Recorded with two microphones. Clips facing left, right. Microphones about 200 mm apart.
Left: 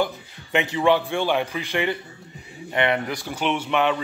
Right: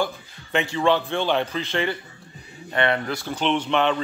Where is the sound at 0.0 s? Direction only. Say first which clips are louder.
Left 1 dB; 20° left (ahead or behind).